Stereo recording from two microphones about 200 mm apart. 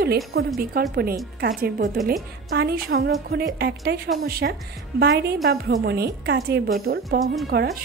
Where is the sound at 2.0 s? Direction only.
45° right (ahead or behind).